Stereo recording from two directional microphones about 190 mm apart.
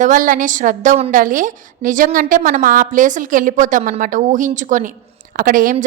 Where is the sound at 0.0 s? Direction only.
45° right (ahead or behind).